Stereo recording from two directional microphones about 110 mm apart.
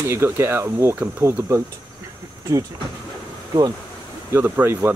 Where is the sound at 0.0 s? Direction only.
25° right (ahead or behind).